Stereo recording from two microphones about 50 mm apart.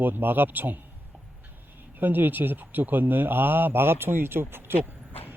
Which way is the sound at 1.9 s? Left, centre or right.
Right.